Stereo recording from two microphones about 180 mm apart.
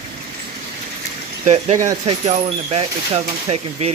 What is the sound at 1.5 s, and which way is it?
Speech, 40° right (ahead or behind).